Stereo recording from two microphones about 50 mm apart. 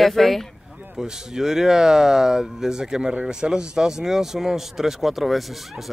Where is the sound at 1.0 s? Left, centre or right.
Centre.